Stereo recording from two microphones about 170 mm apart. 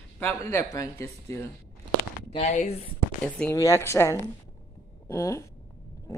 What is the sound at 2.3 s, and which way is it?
Speech, 35° left (ahead or behind).